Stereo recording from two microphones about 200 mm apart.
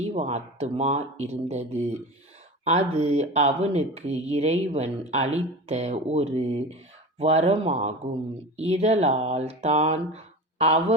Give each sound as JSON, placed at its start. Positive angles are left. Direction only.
{"t": 0.1, "sound": "speech", "side_deg": -35}